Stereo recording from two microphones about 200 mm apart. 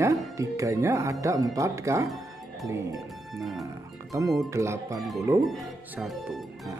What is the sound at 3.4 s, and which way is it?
Speech, centre (ahead or behind).